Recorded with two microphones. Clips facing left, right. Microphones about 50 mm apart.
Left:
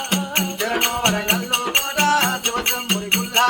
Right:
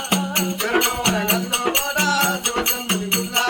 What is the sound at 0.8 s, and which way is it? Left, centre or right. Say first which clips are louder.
Music: even; left.